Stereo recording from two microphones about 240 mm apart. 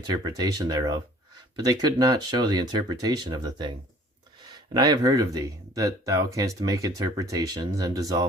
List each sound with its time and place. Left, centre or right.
0.1 s speech: centre